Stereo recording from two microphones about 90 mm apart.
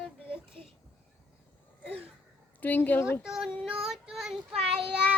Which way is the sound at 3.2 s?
5° right (ahead or behind).